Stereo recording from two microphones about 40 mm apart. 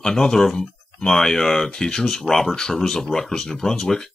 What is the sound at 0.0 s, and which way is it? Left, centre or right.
Speech, centre.